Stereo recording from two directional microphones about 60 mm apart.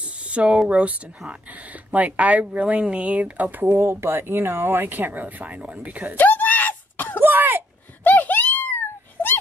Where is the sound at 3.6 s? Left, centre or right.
Right.